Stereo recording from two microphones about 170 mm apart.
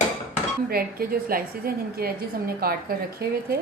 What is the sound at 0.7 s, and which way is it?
A woman's voice, 60° right (ahead or behind).